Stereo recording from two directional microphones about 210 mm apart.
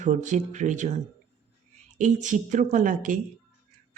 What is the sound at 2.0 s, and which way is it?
Speech, 35° right (ahead or behind).